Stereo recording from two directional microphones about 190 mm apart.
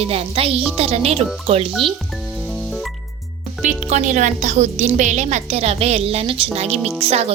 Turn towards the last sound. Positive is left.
turn(degrees=-30)  # may be behind; listen again after turning